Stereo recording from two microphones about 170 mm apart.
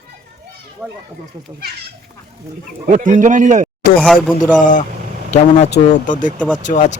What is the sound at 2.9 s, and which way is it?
Speech, 50° right (ahead or behind).